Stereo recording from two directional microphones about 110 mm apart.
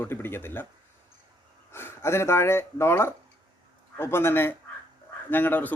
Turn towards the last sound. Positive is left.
turn(degrees=15)  # may be behind; listen again after turning